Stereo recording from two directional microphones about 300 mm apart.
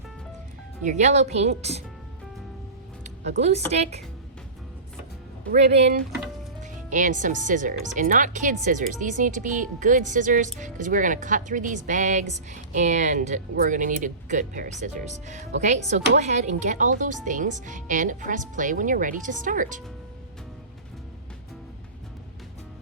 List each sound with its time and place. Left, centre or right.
0.9 s speech: right
3.0 s music: right
3.7 s speech: right
5.5 s speech: right